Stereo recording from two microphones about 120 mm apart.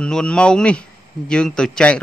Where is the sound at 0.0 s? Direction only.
5° left (ahead or behind).